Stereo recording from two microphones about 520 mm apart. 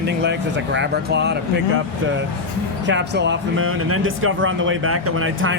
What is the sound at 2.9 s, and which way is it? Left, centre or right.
Speech, centre.